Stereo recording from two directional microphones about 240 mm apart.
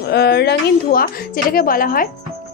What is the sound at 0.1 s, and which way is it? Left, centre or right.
A woman's voice, left.